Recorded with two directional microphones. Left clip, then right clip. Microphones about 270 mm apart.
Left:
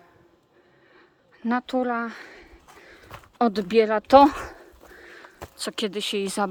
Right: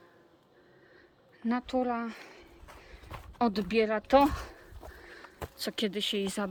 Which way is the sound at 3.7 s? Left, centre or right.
Centre.